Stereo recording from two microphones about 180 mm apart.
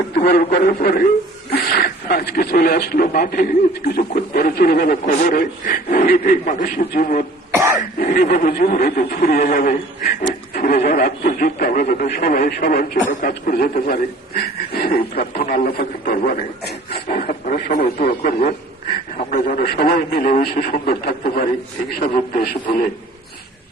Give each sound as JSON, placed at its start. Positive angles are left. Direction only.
{"t": 0.2, "sound": "a man's voice", "side_deg": 55}